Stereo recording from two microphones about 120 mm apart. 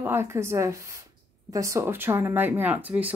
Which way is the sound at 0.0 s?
20° right (ahead or behind).